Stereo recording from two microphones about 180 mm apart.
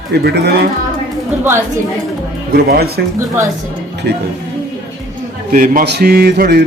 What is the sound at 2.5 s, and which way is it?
Speech, 60° right (ahead or behind).